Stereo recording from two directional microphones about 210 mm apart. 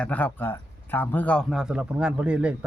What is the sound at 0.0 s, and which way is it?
Speech, 5° left (ahead or behind).